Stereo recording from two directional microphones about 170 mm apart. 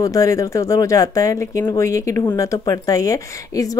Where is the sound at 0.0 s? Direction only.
20° left (ahead or behind).